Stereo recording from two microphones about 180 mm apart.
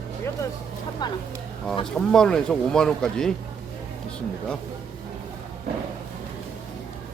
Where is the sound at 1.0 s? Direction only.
25° left (ahead or behind).